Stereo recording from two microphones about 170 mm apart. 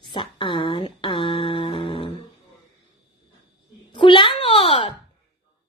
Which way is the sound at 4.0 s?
30° left (ahead or behind).